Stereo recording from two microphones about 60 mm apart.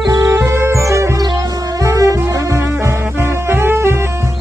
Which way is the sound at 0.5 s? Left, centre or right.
Right.